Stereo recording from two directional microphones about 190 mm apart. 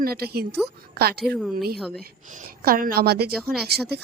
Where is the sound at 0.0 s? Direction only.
55° right (ahead or behind).